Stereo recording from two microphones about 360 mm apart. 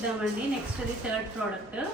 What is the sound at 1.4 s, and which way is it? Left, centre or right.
Speech, centre.